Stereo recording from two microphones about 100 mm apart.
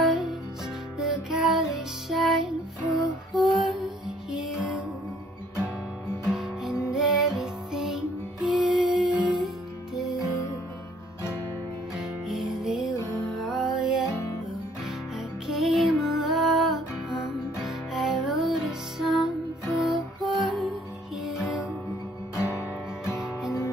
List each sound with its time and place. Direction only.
0.0 s music: 5° right (ahead or behind)
6.2 s music: 5° right (ahead or behind)
10.2 s music: 30° left (ahead or behind)
12.0 s music: centre (ahead or behind)
14.0 s music: 30° left (ahead or behind)
15.1 s music: centre (ahead or behind)
17.6 s music: centre (ahead or behind)
22.3 s guitar: 25° left (ahead or behind)
23.1 s music: 5° right (ahead or behind)